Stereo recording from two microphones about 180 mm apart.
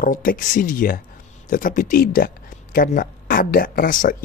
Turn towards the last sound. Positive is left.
turn(degrees=50)  # may be behind; listen again after turning